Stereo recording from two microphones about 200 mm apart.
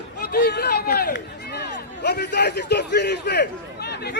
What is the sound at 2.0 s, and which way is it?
A man's voice, 55° left (ahead or behind).